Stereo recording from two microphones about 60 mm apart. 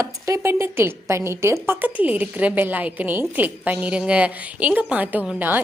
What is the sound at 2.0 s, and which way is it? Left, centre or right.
A woman's voice, right.